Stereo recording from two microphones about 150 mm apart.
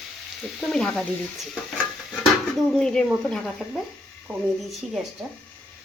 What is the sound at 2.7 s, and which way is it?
Stir, 5° left (ahead or behind).